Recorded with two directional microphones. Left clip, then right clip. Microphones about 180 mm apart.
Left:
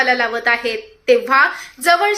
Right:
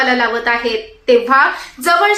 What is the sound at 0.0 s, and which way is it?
A woman's voice, 15° left (ahead or behind).